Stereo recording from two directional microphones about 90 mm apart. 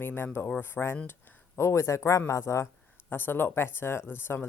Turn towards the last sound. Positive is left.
turn(degrees=25)  # may be behind; listen again after turning